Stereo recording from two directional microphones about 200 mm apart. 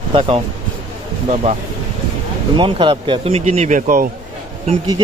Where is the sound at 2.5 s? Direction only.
25° right (ahead or behind); by 4.1 s 45° right (ahead or behind).